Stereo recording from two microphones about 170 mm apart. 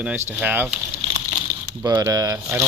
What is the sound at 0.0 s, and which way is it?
Speech, 10° right (ahead or behind).